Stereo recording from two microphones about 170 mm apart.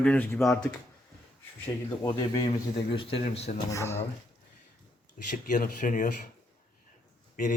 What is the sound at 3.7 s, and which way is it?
Speech, 15° left (ahead or behind).